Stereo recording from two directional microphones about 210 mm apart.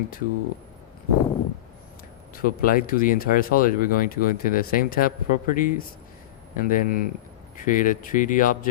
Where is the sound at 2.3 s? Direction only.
45° left (ahead or behind).